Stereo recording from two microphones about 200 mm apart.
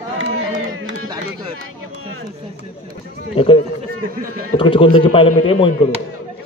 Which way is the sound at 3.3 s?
25° left (ahead or behind).